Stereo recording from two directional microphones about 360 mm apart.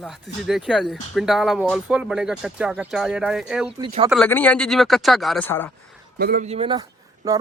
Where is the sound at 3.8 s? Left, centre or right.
Centre.